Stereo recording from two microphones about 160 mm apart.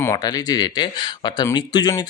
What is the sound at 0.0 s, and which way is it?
Speech, 20° left (ahead or behind).